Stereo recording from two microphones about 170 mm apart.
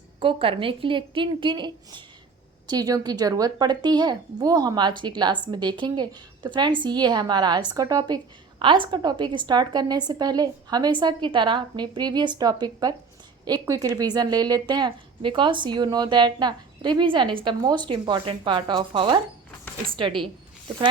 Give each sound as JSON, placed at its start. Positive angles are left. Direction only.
{"t": 0.2, "sound": "a woman's voice", "side_deg": -30}